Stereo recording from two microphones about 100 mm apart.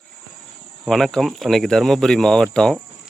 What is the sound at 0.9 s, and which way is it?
Speech, 5° left (ahead or behind).